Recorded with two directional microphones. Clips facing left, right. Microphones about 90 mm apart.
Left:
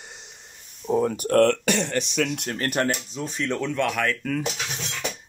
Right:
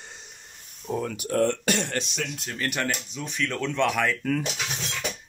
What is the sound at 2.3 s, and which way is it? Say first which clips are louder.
Speech: left 6 dB; 65° left (ahead or behind).